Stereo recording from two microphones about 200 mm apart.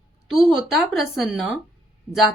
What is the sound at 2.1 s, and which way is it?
Speech, 25° right (ahead or behind).